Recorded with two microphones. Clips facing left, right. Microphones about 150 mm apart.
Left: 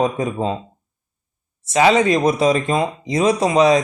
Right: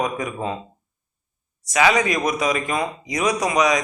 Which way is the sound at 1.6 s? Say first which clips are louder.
Left 4 dB; 30° left (ahead or behind).